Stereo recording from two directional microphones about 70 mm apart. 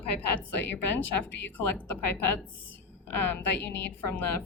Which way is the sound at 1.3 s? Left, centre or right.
Left.